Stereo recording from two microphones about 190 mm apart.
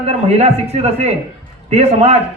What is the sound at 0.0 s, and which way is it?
A man's voice, 35° right (ahead or behind).